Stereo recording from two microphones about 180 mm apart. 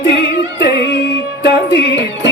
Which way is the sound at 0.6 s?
75° left (ahead or behind).